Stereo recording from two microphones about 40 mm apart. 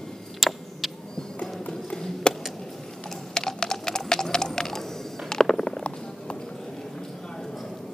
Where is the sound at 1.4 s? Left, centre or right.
Centre.